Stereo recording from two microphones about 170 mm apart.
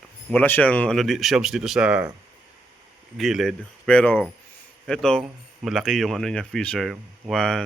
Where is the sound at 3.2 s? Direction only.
Centre (ahead or behind).